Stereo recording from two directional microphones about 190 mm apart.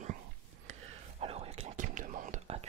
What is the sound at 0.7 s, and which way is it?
Whispering, 35° right (ahead or behind).